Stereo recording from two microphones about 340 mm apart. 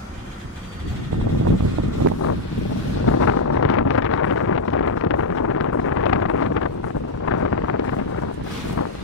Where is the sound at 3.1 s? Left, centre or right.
Left.